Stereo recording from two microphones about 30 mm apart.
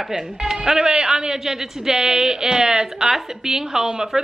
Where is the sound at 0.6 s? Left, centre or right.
Right.